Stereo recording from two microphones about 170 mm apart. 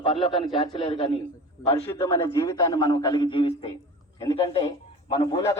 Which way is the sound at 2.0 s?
15° left (ahead or behind).